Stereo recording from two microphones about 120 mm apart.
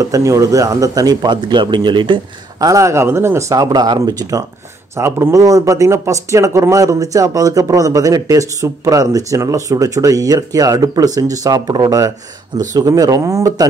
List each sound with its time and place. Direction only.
0.0 s speech: 25° right (ahead or behind); by 2.1 s 40° right (ahead or behind)
2.6 s speech: 25° right (ahead or behind)